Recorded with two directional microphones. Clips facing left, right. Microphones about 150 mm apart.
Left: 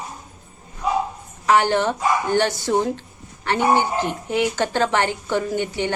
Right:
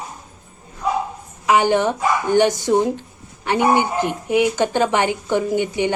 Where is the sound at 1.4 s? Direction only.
15° right (ahead or behind).